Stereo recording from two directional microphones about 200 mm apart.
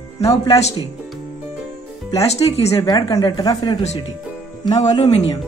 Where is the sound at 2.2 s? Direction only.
30° left (ahead or behind).